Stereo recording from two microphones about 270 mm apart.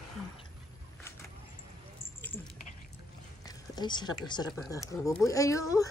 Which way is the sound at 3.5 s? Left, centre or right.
Centre.